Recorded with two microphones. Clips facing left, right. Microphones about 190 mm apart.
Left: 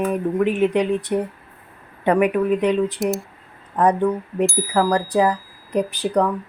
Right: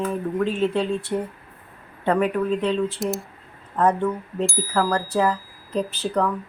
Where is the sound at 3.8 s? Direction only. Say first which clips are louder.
Left 3 dB; 15° left (ahead or behind).